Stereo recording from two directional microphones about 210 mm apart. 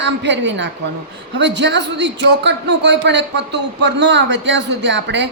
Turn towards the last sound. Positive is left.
turn(degrees=-55)  # may be behind; listen again after turning